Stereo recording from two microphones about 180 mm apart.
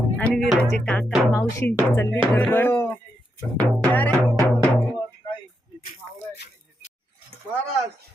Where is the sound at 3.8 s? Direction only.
10° left (ahead or behind).